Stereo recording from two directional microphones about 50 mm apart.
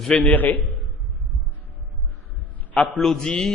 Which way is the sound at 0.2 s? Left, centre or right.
Left.